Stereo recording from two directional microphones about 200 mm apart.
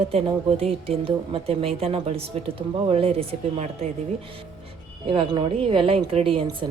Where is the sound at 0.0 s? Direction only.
30° right (ahead or behind).